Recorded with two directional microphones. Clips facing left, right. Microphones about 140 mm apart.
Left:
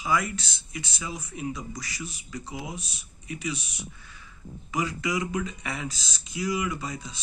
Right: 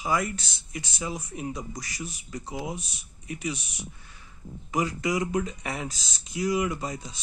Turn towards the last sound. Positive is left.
turn(degrees=-40)  # may be behind; listen again after turning